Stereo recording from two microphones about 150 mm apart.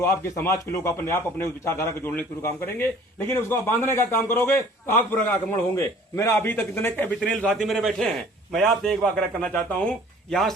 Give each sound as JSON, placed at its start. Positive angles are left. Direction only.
{"t": 0.0, "sound": "a man's voice", "side_deg": 15}